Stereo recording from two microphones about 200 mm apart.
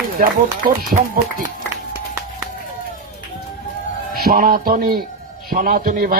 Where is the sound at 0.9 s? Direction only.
45° right (ahead or behind).